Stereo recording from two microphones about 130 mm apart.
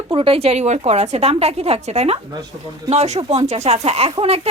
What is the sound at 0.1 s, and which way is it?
A woman's voice, 45° right (ahead or behind).